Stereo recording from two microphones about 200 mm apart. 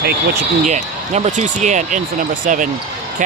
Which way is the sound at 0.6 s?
35° right (ahead or behind).